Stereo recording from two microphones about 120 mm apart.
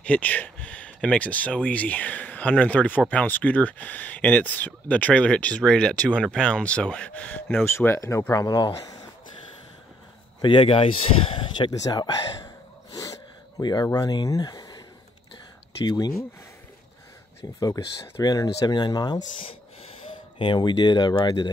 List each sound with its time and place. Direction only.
0.0 s speech: 10° left (ahead or behind)
8.3 s speech: 35° left (ahead or behind)
10.4 s speech: 45° left (ahead or behind)
11.8 s speech: 35° left (ahead or behind)
12.9 s a sound: 30° left (ahead or behind)
14.2 s speech: 30° left (ahead or behind)
15.8 s speech: 35° left (ahead or behind)
17.6 s speech: 30° left (ahead or behind)
20.3 s speech: 40° left (ahead or behind)